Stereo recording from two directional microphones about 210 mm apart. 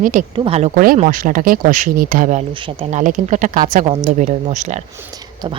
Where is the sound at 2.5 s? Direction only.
25° right (ahead or behind).